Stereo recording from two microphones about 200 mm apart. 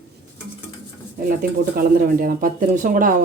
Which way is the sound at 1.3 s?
45° right (ahead or behind).